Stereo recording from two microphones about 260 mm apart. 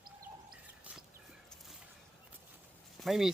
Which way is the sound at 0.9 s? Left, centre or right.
Centre.